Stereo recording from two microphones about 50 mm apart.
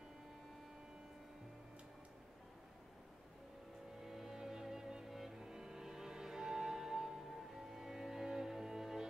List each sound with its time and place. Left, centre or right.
4.0 s music: centre